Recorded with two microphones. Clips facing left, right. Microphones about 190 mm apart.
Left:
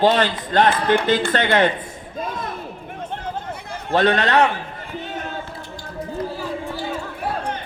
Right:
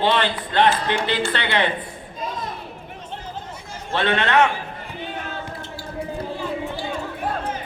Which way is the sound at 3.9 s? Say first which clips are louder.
Left 3 dB; 40° left (ahead or behind).